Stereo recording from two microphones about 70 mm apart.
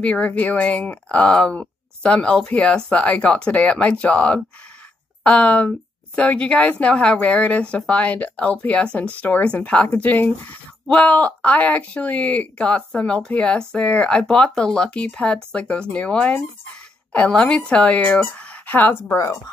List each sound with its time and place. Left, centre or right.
0.0 s a woman's voice: centre